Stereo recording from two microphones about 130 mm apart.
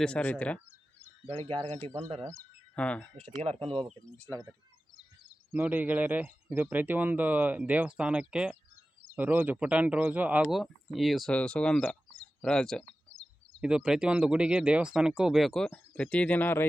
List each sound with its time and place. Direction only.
0.0 s speech: 10° left (ahead or behind)
1.3 s speech: 40° right (ahead or behind)
2.4 s speech: 10° left (ahead or behind)
3.4 s speech: 50° right (ahead or behind)
5.5 s speech: 10° right (ahead or behind); by 12.8 s 5° left (ahead or behind)
13.6 s speech: 5° right (ahead or behind); by 16.6 s 15° left (ahead or behind)